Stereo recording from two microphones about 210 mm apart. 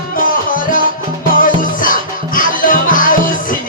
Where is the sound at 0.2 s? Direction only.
40° left (ahead or behind).